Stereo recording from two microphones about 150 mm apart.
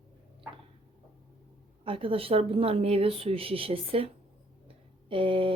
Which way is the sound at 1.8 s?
35° right (ahead or behind).